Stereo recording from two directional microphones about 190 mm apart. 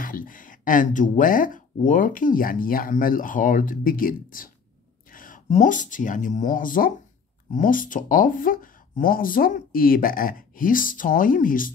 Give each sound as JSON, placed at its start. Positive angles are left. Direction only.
{"t": 0.0, "sound": "speech", "side_deg": 45}